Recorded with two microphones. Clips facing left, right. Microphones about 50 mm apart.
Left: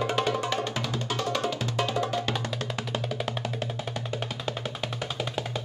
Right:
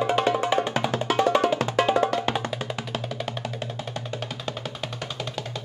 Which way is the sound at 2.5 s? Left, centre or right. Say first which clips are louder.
Right 1 dB; centre.